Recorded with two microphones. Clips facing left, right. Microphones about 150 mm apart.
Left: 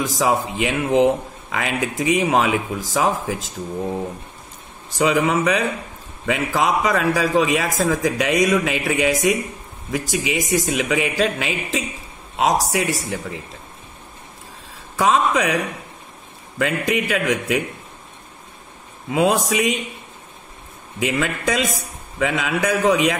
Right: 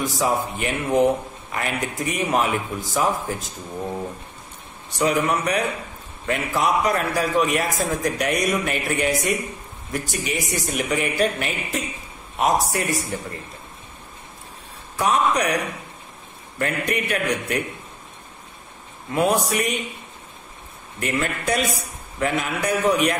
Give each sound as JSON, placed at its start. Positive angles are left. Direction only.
{"t": 0.0, "sound": "a man's voice", "side_deg": 90}
{"t": 4.9, "sound": "a man's voice", "side_deg": 90}
{"t": 15.0, "sound": "a man's voice", "side_deg": 90}
{"t": 19.1, "sound": "a man's voice", "side_deg": 90}
{"t": 21.0, "sound": "a man's voice", "side_deg": 90}